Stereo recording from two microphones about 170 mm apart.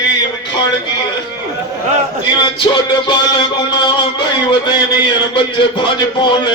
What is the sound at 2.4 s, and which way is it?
Music, 25° left (ahead or behind).